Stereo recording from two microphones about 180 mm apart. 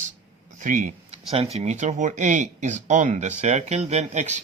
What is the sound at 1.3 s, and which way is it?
Speech, 35° right (ahead or behind).